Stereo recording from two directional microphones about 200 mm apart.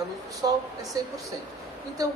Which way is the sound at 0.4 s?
15° right (ahead or behind).